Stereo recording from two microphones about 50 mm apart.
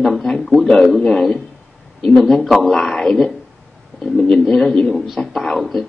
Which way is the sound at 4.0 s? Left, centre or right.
Centre.